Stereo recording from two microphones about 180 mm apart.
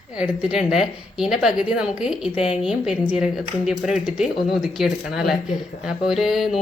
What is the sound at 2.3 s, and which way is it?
Speech, 35° left (ahead or behind).